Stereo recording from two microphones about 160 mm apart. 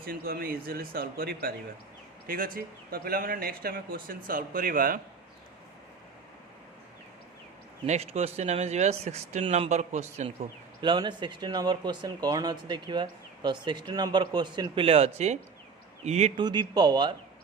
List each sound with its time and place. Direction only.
0.0 s speech: 70° right (ahead or behind)
7.9 s speech: 40° right (ahead or behind)
10.8 s speech: 30° right (ahead or behind)
16.4 s speech: 25° right (ahead or behind)